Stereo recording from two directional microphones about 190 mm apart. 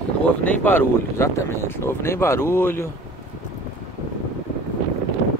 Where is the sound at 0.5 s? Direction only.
10° left (ahead or behind).